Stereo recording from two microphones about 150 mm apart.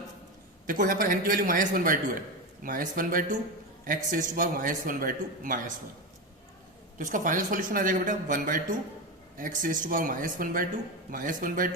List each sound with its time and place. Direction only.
0.7 s a man's voice: 65° right (ahead or behind)
7.0 s a man's voice: 60° right (ahead or behind)